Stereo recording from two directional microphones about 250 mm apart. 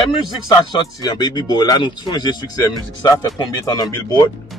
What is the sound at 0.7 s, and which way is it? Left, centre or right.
Speech, centre.